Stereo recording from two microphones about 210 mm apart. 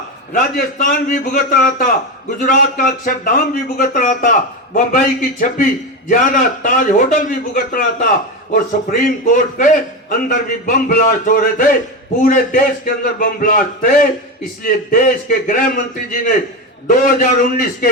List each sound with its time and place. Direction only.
0.3 s speech: 40° left (ahead or behind)
17.0 s speech: 40° left (ahead or behind)